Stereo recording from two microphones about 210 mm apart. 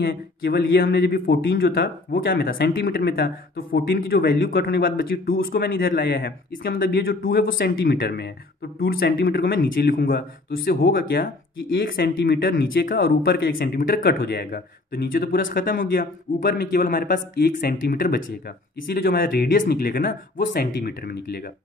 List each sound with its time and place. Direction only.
0.0 s speech: 50° left (ahead or behind)